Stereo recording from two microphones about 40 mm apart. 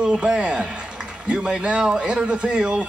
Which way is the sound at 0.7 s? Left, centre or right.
Right.